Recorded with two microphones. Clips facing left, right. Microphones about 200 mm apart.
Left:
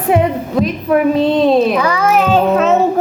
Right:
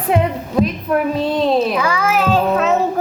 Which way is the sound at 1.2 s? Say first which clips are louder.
Left 5 dB; 25° left (ahead or behind).